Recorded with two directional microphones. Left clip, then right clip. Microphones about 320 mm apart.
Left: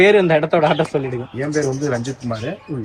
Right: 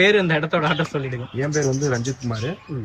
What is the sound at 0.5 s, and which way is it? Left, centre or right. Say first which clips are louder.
Speech: left 6 dB; left.